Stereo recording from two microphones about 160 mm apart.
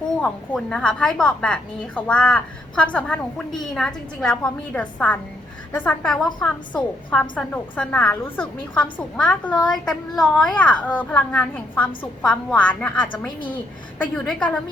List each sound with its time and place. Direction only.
0.2 s a woman's voice: 5° left (ahead or behind)
13.1 s a woman's voice: 30° left (ahead or behind)
14.0 s a woman's voice: 5° left (ahead or behind)